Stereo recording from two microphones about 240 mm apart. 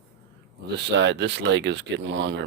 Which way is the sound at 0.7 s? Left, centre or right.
Right.